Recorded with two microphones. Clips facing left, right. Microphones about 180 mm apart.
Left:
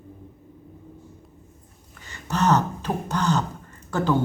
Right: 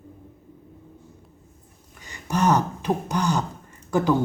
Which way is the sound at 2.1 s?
15° right (ahead or behind).